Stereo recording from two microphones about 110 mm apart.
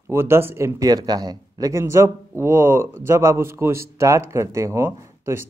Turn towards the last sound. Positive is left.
turn(degrees=-25)  # may be behind; listen again after turning